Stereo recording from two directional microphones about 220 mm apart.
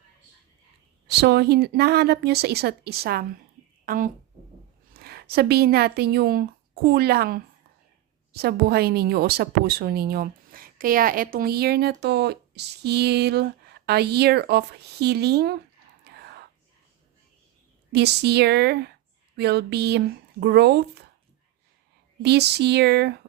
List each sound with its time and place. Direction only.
1.0 s a woman's voice: 50° right (ahead or behind)
16.0 s whispering: 50° right (ahead or behind)
17.9 s a woman's voice: 50° right (ahead or behind)
22.2 s a woman's voice: 50° right (ahead or behind)